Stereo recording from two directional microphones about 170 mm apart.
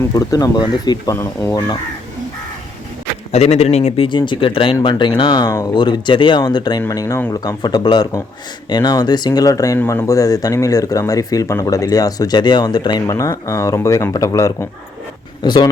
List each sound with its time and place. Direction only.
0.0 s speech: 20° left (ahead or behind)
3.3 s speech: 40° left (ahead or behind)